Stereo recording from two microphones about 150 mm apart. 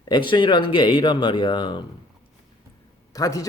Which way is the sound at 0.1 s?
30° left (ahead or behind).